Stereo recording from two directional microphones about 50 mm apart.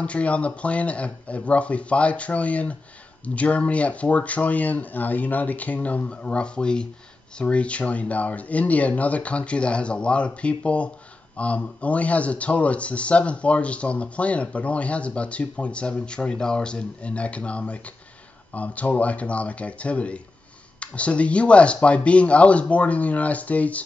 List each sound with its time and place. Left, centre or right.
0.0 s a man's voice: left